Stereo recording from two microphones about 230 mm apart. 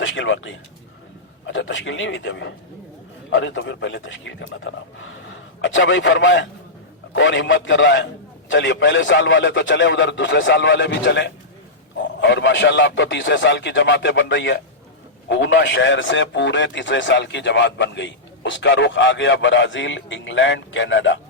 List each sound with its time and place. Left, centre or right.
0.0 s a man's voice: left